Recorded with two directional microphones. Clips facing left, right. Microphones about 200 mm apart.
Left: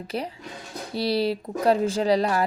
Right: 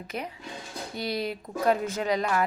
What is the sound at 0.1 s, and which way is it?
A woman's voice, 35° left (ahead or behind).